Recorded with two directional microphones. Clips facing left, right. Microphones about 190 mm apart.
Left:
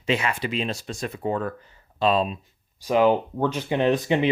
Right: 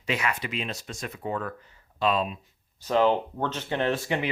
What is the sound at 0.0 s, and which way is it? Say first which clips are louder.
Speech: left 4 dB; 25° left (ahead or behind).